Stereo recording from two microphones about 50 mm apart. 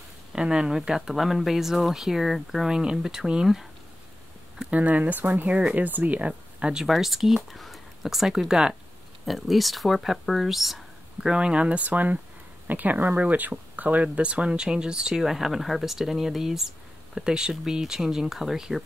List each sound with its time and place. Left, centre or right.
0.3 s speech: centre
4.6 s speech: right
6.6 s speech: centre
6.9 s speech: centre
9.2 s speech: centre
11.2 s speech: centre